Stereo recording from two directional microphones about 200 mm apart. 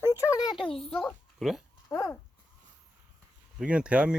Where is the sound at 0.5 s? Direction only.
Centre (ahead or behind).